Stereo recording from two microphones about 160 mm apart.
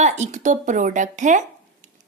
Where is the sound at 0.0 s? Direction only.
50° right (ahead or behind).